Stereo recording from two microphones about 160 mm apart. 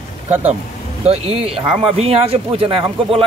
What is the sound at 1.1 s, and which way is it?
Speech, 40° right (ahead or behind).